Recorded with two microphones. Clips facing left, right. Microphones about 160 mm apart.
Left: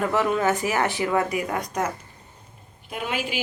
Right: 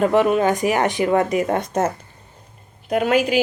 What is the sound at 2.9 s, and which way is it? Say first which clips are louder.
Speech: right 12 dB; 75° right (ahead or behind).